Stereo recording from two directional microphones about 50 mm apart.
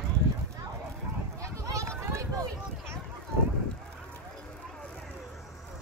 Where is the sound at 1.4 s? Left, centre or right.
Right.